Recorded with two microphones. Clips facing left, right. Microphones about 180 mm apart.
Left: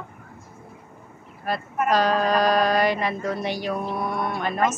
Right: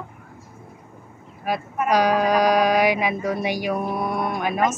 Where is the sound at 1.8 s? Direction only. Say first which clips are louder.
Right 2 dB; 15° right (ahead or behind).